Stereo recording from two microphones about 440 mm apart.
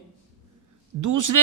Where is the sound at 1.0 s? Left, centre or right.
Right.